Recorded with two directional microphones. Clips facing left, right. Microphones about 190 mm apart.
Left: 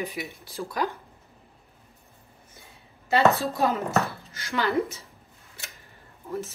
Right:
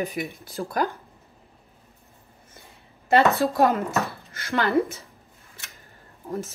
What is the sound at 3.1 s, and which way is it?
Speech, 55° right (ahead or behind).